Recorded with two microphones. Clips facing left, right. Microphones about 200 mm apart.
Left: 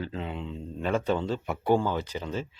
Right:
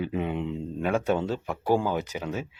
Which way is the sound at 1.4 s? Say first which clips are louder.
Even; 5° left (ahead or behind).